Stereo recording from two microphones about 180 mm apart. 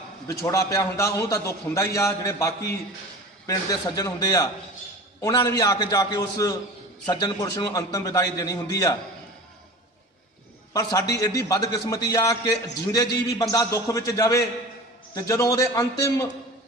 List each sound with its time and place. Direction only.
0.3 s a man's voice: 15° left (ahead or behind)
10.8 s a man's voice: 20° left (ahead or behind)